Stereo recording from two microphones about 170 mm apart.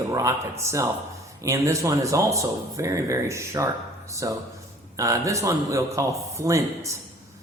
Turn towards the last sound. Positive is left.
turn(degrees=-20)  # may be behind; listen again after turning